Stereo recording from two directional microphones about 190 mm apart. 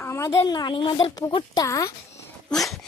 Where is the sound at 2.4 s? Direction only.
Centre (ahead or behind).